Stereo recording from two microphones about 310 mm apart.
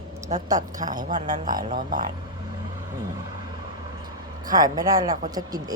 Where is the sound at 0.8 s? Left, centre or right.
Centre.